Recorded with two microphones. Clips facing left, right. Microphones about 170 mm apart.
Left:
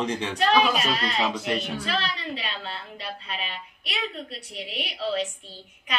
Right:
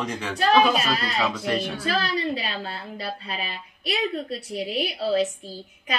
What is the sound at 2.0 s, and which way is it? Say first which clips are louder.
A woman's voice: right 6 dB; 35° right (ahead or behind).